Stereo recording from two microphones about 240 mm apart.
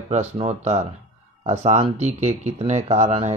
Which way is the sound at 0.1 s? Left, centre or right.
Right.